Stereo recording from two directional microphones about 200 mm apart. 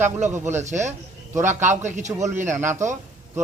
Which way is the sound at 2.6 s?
10° right (ahead or behind).